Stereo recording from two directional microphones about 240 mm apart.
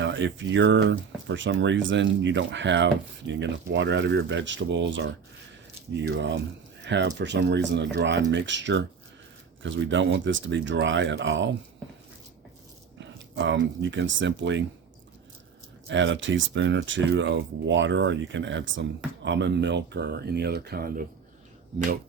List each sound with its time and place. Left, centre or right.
0.0 s speech: right
13.0 s speech: right
15.9 s speech: right